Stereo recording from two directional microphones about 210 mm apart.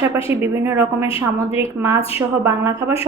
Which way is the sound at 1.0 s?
25° left (ahead or behind).